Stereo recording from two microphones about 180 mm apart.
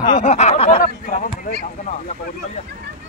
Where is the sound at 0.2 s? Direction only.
40° left (ahead or behind).